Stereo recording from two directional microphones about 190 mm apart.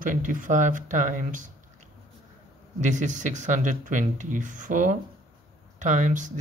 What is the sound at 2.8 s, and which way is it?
Speech, 40° right (ahead or behind).